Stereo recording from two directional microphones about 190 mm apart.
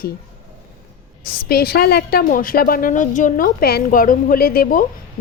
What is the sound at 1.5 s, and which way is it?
A woman's voice, 55° left (ahead or behind).